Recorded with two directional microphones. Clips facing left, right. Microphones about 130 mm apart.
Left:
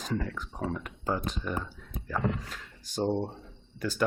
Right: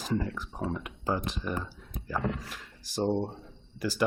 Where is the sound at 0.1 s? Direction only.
20° right (ahead or behind).